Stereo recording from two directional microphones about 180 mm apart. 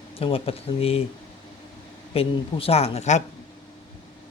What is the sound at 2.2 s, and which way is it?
A woman's voice, 35° left (ahead or behind).